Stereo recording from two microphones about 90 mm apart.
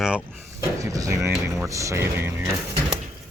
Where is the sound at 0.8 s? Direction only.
40° right (ahead or behind).